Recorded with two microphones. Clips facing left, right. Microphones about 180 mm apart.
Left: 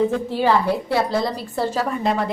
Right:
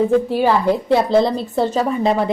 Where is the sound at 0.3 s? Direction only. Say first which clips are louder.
Right 3 dB; 15° right (ahead or behind).